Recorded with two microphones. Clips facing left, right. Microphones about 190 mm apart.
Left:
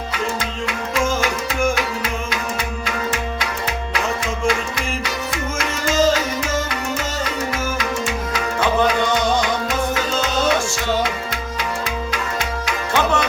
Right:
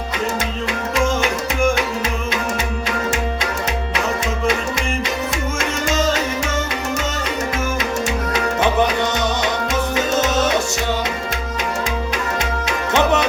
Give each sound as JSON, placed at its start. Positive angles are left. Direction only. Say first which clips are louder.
{"t": 12.6, "sound": "music", "louder": "right 3 dB", "side_deg": -20}